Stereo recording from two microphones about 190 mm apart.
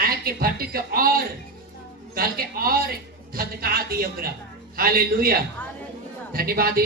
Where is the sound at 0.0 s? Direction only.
50° right (ahead or behind).